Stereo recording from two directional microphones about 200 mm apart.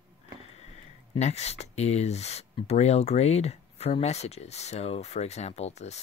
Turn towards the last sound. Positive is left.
turn(degrees=35)  # may be behind; listen again after turning